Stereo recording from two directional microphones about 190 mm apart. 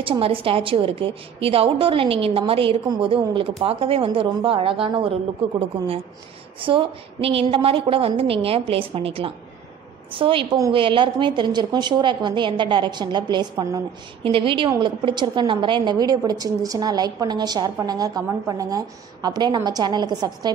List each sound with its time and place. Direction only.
0.0 s a woman's voice: 30° right (ahead or behind)
6.6 s a woman's voice: 25° right (ahead or behind)